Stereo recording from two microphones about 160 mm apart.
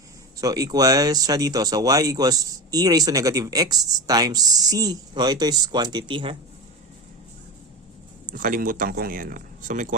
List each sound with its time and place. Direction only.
0.3 s speech: 20° right (ahead or behind)
8.3 s speech: 60° right (ahead or behind)